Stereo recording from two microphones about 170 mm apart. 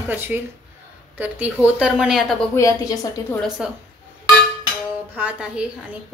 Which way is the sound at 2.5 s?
15° left (ahead or behind).